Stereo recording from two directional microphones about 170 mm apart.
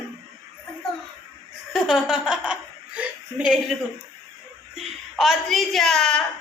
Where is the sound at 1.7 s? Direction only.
5° right (ahead or behind).